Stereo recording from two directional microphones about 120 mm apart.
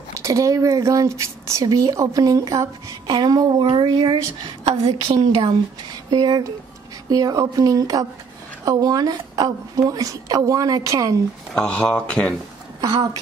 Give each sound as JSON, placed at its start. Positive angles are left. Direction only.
{"t": 0.1, "sound": "speech", "side_deg": -25}
{"t": 4.6, "sound": "a woman's voice", "side_deg": -55}
{"t": 6.0, "sound": "speech", "side_deg": -35}
{"t": 11.5, "sound": "speech", "side_deg": 5}
{"t": 12.8, "sound": "speech", "side_deg": -30}